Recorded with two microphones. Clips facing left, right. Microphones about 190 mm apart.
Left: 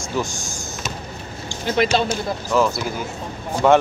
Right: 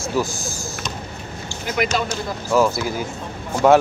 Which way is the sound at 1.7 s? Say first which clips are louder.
Left 3 dB; 30° left (ahead or behind).